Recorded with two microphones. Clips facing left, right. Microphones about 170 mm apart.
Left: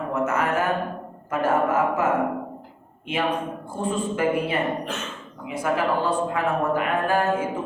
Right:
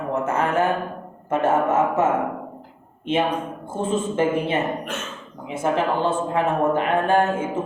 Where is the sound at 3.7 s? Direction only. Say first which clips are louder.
Right 4 dB; 20° right (ahead or behind).